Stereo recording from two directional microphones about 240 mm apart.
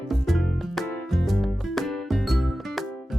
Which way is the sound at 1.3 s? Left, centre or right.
Centre.